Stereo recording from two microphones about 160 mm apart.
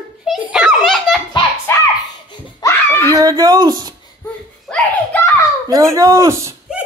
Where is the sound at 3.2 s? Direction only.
25° right (ahead or behind).